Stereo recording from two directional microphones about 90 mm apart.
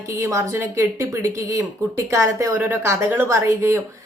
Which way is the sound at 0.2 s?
35° right (ahead or behind).